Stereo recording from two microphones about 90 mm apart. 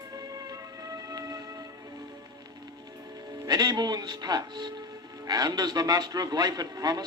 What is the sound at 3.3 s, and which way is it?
A man's voice, 50° right (ahead or behind).